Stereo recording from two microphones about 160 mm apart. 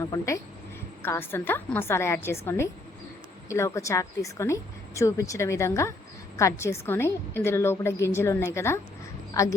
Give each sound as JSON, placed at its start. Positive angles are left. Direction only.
{"t": 1.0, "sound": "a woman's voice", "side_deg": 15}